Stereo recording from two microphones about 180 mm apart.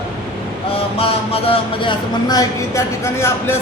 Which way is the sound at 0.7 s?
30° left (ahead or behind).